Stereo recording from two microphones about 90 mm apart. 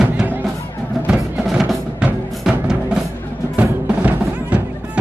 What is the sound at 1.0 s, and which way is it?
Music, 5° right (ahead or behind).